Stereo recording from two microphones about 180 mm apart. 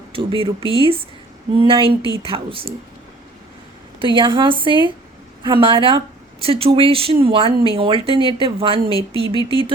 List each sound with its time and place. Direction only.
0.1 s a woman's voice: 30° right (ahead or behind)
4.0 s a woman's voice: 25° right (ahead or behind)